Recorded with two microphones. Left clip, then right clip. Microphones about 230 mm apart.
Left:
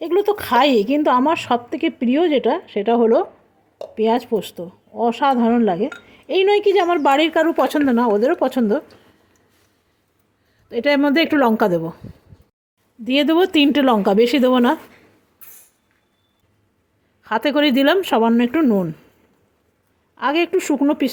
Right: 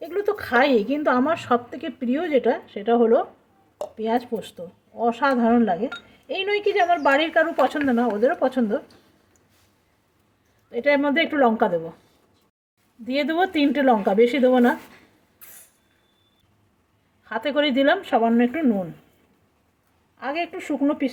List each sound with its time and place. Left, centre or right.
0.0 s a woman's voice: left
10.7 s a woman's voice: left
13.1 s a woman's voice: left
17.2 s a woman's voice: left
20.1 s speech: left